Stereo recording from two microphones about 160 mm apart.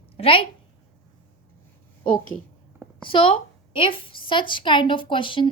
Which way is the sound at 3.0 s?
30° left (ahead or behind).